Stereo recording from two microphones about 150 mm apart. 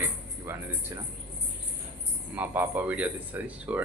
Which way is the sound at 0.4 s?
15° right (ahead or behind).